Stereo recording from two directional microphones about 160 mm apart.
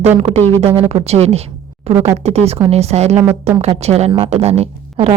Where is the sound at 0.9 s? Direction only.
40° right (ahead or behind).